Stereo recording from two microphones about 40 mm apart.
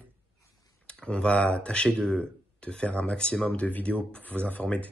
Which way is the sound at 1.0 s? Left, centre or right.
Left.